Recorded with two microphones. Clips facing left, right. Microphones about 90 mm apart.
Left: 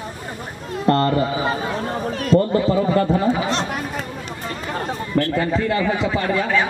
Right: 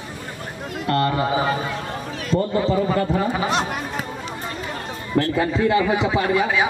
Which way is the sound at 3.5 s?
10° right (ahead or behind).